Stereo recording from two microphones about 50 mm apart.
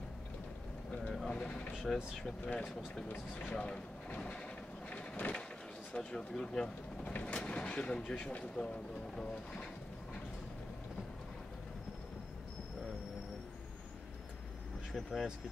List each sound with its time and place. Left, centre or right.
1.3 s a sound: centre
1.9 s speech: centre
2.4 s speech: left
3.1 s speech: left
3.5 s speech: centre
4.8 s a sound: left
5.9 s speech: centre
7.1 s speech: left
9.2 s pigeon: centre
14.9 s speech: centre